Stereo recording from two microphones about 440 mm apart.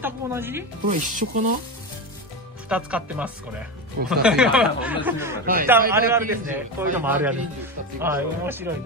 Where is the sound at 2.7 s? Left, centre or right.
Centre.